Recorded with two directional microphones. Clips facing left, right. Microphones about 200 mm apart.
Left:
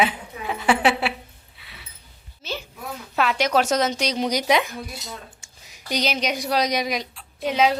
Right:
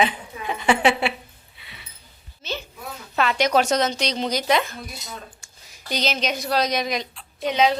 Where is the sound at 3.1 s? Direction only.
5° left (ahead or behind).